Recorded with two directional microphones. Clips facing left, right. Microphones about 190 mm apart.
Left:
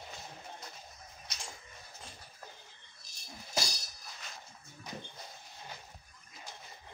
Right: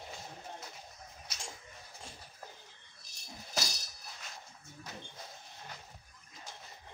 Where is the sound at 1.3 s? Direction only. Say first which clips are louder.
Left 1 dB; 5° right (ahead or behind).